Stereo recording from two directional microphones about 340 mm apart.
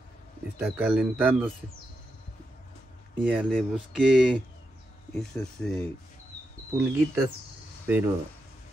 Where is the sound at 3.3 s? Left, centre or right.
Centre.